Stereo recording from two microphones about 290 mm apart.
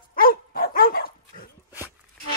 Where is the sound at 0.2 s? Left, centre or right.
Left.